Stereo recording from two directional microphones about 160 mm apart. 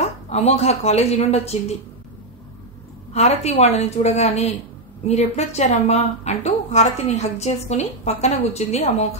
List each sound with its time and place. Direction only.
0.0 s a woman's voice: 40° left (ahead or behind)
3.1 s a woman's voice: 45° left (ahead or behind)